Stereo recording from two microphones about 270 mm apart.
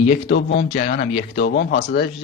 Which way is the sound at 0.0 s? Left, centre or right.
Left.